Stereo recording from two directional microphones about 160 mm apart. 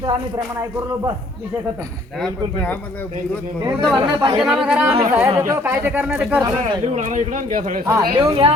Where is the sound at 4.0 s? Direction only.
25° right (ahead or behind).